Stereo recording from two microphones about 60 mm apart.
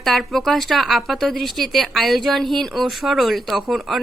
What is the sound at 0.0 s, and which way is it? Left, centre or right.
Speech, centre.